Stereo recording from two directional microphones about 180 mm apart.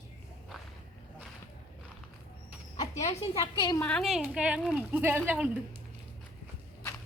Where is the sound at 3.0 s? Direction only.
35° left (ahead or behind).